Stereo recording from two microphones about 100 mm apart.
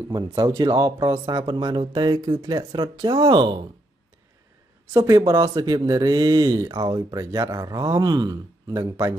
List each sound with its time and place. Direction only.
0.1 s speech: 40° right (ahead or behind)
5.1 s speech: 40° right (ahead or behind)